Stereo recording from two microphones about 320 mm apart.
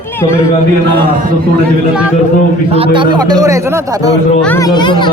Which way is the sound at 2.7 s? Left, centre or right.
Centre.